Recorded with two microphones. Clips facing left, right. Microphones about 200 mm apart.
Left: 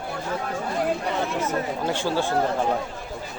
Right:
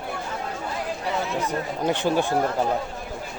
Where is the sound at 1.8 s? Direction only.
20° right (ahead or behind).